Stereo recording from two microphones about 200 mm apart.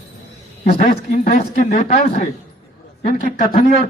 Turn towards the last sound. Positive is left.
turn(degrees=45)  # may be behind; listen again after turning